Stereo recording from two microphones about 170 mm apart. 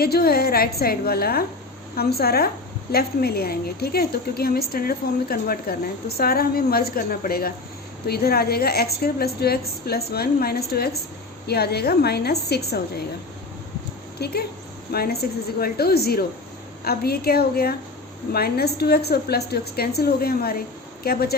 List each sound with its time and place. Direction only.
0.0 s a woman's voice: 65° left (ahead or behind)
14.2 s a woman's voice: 70° left (ahead or behind)